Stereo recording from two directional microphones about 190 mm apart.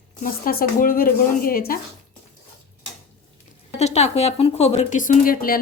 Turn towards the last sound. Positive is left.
turn(degrees=50)  # may be behind; listen again after turning